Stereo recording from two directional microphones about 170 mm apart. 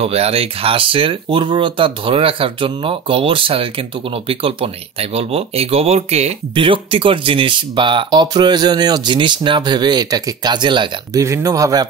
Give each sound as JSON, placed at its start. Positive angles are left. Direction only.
{"t": 0.0, "sound": "speech", "side_deg": -35}